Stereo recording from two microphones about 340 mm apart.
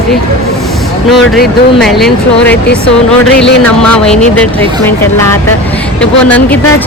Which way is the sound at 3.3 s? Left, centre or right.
Left.